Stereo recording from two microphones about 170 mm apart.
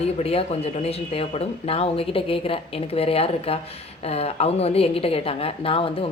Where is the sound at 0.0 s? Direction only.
35° left (ahead or behind).